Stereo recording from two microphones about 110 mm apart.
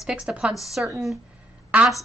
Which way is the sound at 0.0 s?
10° right (ahead or behind).